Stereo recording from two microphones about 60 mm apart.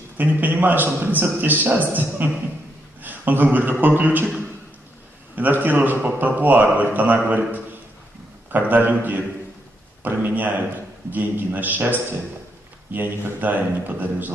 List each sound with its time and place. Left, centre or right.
0.2 s a man's voice: right
5.3 s a man's voice: right
8.5 s a man's voice: right
12.9 s a man's voice: right